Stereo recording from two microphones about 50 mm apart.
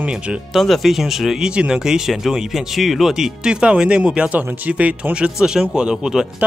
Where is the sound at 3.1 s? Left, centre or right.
Centre.